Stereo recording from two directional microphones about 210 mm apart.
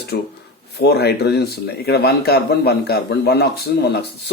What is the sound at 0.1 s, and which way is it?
Speech, 55° left (ahead or behind).